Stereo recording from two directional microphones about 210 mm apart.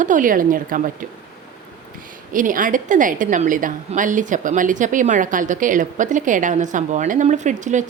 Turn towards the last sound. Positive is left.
turn(degrees=-35)  # may be behind; listen again after turning